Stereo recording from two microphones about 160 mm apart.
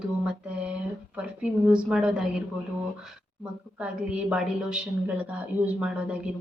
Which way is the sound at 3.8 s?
5° right (ahead or behind).